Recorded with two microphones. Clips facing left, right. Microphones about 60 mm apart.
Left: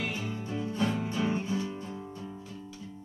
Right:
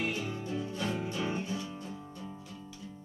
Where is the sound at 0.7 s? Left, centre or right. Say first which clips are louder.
Left 7 dB; left.